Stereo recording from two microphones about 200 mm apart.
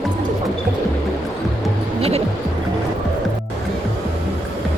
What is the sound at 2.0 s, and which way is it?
Music, 30° right (ahead or behind).